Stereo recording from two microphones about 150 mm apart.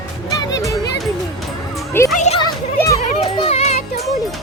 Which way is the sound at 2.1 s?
50° left (ahead or behind).